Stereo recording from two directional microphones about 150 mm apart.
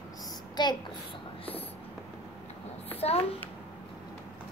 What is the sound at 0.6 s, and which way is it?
Speech, 30° left (ahead or behind).